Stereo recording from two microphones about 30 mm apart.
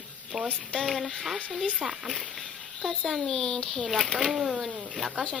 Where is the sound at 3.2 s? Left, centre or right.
Centre.